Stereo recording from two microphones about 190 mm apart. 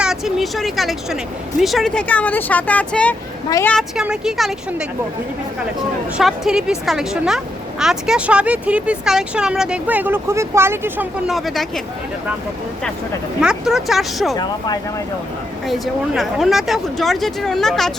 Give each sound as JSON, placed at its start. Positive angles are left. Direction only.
{"t": 0.0, "sound": "speech", "side_deg": 0}
{"t": 6.1, "sound": "speech", "side_deg": 0}
{"t": 11.3, "sound": "speech", "side_deg": 0}
{"t": 13.4, "sound": "speech", "side_deg": -5}
{"t": 15.6, "sound": "speech", "side_deg": 0}